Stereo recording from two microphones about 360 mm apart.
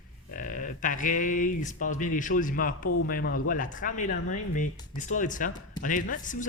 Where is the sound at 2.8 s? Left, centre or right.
Left.